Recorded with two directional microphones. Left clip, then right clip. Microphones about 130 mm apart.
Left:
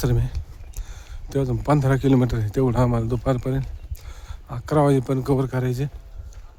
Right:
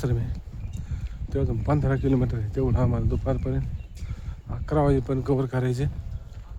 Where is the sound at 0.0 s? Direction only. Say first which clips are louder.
Left 5 dB; 55° left (ahead or behind).